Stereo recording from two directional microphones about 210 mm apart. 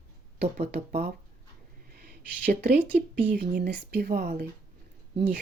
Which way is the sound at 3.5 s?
55° right (ahead or behind).